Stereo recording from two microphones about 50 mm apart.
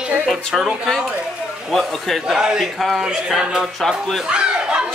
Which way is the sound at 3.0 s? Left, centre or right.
Centre.